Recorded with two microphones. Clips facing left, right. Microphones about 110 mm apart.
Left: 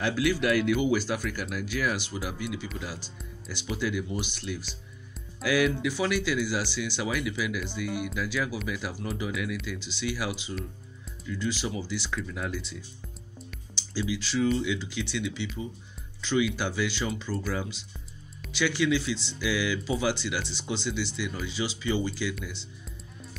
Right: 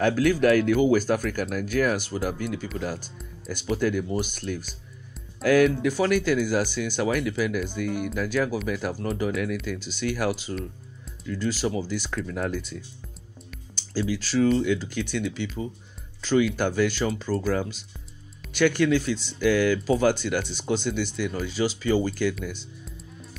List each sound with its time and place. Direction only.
0.0 s speech: 45° right (ahead or behind)
12.2 s speech: 60° right (ahead or behind)
13.7 s speech: 45° right (ahead or behind)